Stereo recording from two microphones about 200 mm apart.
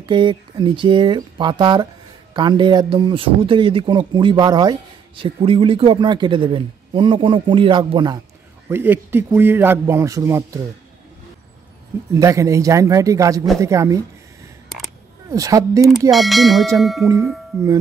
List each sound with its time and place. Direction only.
0.0 s a man's voice: 20° right (ahead or behind)
8.6 s speech: 10° right (ahead or behind)
12.1 s speech: 15° right (ahead or behind)
15.2 s speech: 15° right (ahead or behind)
16.1 s speech: centre (ahead or behind)